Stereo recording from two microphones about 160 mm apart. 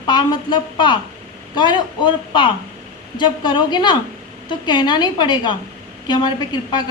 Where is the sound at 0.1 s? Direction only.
25° left (ahead or behind).